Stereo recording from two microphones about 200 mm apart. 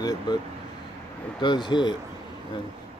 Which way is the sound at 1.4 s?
25° left (ahead or behind).